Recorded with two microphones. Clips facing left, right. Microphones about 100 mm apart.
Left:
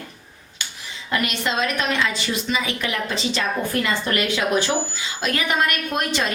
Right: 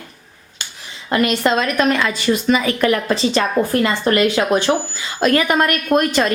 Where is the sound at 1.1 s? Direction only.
45° right (ahead or behind).